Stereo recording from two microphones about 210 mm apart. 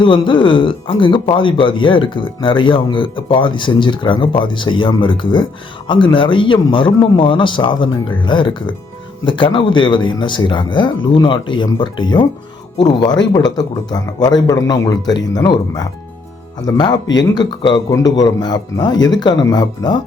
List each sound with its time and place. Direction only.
0.0 s speech: 25° left (ahead or behind)